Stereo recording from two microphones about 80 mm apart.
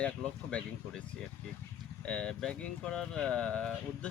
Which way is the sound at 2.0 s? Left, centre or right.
Centre.